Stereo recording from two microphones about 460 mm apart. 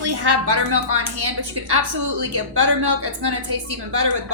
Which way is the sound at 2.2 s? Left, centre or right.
Right.